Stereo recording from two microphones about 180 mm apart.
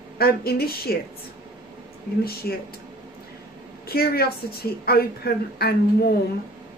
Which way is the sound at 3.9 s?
60° left (ahead or behind).